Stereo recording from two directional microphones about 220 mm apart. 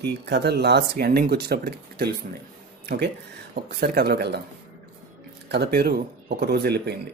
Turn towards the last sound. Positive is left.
turn(degrees=-50)  # may be behind; listen again after turning